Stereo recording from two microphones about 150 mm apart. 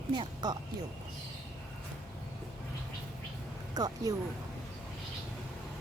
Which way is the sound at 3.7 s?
25° right (ahead or behind).